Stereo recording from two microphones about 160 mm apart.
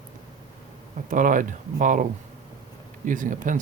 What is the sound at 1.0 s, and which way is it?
Speech, 55° right (ahead or behind).